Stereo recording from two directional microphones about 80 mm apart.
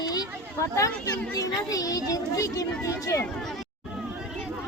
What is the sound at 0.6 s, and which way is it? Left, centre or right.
Speech, left.